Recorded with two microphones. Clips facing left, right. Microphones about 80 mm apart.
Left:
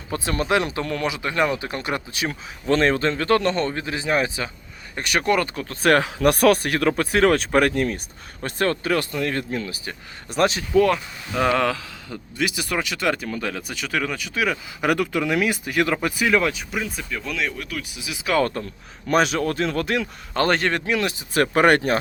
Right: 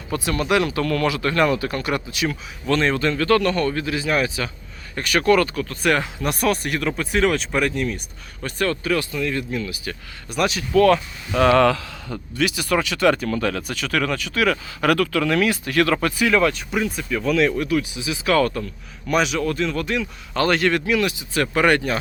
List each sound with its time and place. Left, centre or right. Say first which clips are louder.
0.1 s speech: right 1 dB; left
6.0 s speech: left 6 dB; left
10.8 s speech: right 3 dB; centre
17.9 s speech: right 4 dB; centre
18.3 s speech: right 2 dB; left
20.3 s speech: right 2 dB; left